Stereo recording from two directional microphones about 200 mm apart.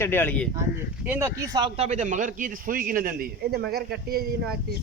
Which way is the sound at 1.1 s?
10° right (ahead or behind).